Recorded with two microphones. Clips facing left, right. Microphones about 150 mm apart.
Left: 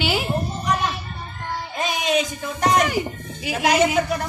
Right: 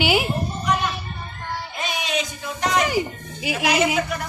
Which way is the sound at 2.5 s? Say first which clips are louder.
Left 2 dB; 45° left (ahead or behind).